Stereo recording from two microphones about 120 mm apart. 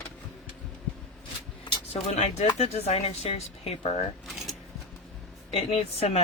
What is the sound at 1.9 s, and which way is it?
Speech, 65° left (ahead or behind).